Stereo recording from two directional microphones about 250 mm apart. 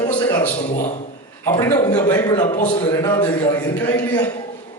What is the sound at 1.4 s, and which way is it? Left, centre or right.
A man's voice, centre.